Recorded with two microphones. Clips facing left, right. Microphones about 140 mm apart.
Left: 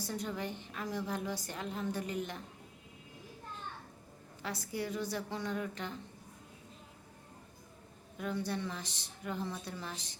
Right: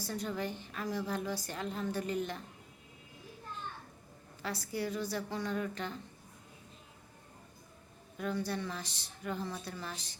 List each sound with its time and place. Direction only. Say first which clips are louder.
0.0 s a woman's voice: right 1 dB; 15° left (ahead or behind)
4.4 s a woman's voice: right 1 dB; 20° left (ahead or behind)
8.2 s a woman's voice: right 1 dB; 20° left (ahead or behind)